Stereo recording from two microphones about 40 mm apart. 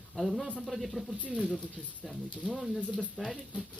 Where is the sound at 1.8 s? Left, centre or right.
Left.